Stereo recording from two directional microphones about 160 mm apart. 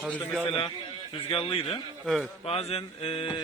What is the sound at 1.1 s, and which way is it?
Speech, 35° left (ahead or behind).